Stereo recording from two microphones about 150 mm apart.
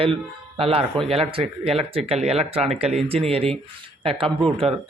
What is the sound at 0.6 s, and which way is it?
Speech, 40° right (ahead or behind).